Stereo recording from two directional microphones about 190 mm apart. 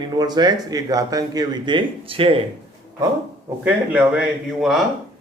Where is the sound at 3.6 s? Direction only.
10° right (ahead or behind).